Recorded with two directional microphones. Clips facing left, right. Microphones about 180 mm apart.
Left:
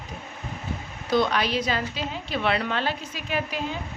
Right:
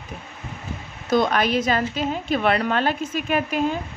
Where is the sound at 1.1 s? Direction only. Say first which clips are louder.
Right 3 dB; 45° right (ahead or behind).